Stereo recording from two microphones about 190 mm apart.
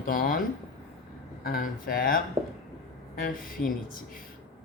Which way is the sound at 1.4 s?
50° left (ahead or behind).